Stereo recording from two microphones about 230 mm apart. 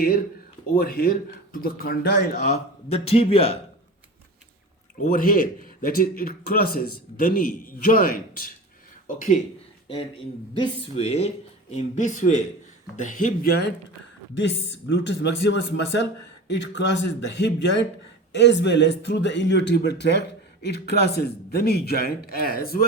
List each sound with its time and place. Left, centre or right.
0.7 s a man's voice: left
2.5 s speech: left
5.0 s a man's voice: left
9.9 s a man's voice: left